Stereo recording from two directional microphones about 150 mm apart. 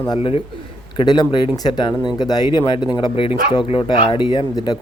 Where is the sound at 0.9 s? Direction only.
25° left (ahead or behind).